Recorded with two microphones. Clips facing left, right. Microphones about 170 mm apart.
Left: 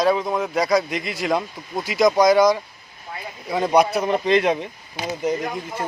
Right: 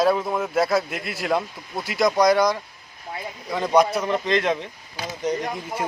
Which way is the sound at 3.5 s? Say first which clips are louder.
Left 1 dB; 10° left (ahead or behind).